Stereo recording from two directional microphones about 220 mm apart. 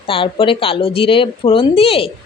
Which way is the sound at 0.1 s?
25° left (ahead or behind).